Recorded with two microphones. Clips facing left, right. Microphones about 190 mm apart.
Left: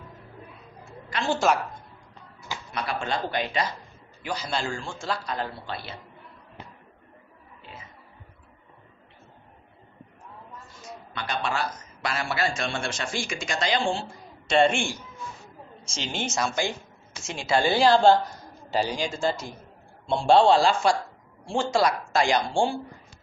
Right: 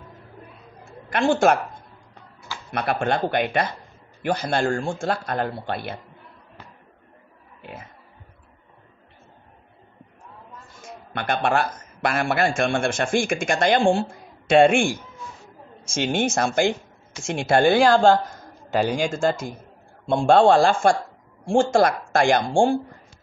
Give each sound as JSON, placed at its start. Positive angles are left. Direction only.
{"t": 1.1, "sound": "a man's voice", "side_deg": -55}
{"t": 2.7, "sound": "a man's voice", "side_deg": -55}
{"t": 10.8, "sound": "a man's voice", "side_deg": -55}